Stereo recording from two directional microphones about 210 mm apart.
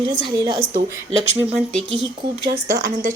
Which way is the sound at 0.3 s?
20° right (ahead or behind).